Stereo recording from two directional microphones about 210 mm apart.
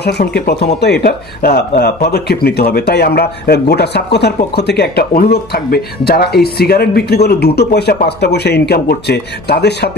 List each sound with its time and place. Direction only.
0.0 s speech: 50° left (ahead or behind)